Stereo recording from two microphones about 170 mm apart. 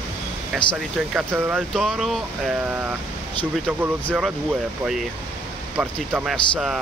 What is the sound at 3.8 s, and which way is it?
Speech, 10° right (ahead or behind).